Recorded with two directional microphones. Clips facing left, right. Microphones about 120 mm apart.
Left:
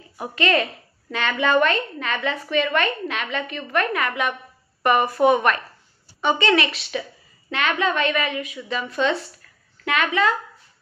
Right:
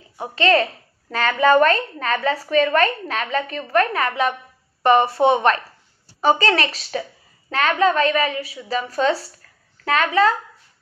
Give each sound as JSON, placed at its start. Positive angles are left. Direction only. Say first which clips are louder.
{"t": 0.2, "sound": "a woman's voice", "louder": "right 4 dB", "side_deg": -30}